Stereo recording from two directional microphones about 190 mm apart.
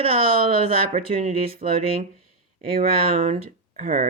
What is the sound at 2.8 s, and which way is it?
Speech, 30° right (ahead or behind).